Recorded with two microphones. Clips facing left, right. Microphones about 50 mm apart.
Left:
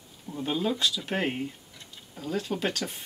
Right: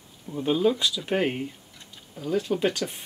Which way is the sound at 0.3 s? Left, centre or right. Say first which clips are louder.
Right 6 dB; centre.